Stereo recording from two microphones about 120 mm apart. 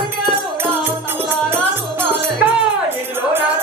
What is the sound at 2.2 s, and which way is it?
Music, 20° right (ahead or behind).